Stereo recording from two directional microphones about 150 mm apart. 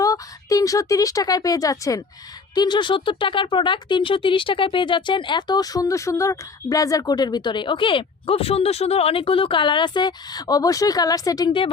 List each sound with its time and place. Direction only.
0.0 s speech: 20° left (ahead or behind)